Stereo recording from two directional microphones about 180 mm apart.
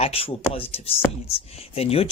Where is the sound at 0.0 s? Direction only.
30° left (ahead or behind).